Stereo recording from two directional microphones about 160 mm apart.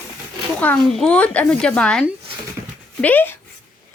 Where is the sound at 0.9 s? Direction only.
5° left (ahead or behind).